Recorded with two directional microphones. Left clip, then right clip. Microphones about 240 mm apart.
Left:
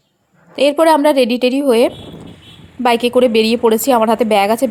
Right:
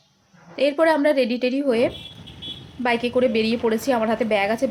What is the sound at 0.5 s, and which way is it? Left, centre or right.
Speech, left.